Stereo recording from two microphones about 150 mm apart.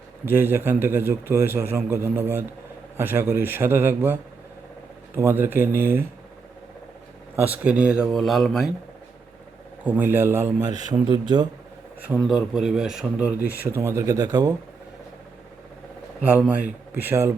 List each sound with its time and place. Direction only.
0.3 s a man's voice: 15° right (ahead or behind)
7.4 s a man's voice: 10° right (ahead or behind)
9.8 s a man's voice: 10° right (ahead or behind); by 11.4 s 30° right (ahead or behind)
12.0 s speech: 5° right (ahead or behind); by 14.5 s 25° right (ahead or behind)
16.2 s a man's voice: 10° right (ahead or behind)